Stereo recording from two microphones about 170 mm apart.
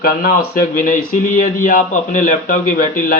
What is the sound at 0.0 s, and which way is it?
A man's voice, 55° left (ahead or behind).